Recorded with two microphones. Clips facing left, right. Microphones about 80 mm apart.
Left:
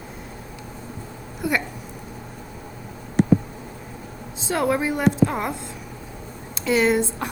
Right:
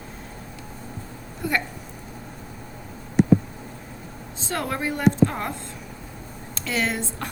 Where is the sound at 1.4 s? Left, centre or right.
Centre.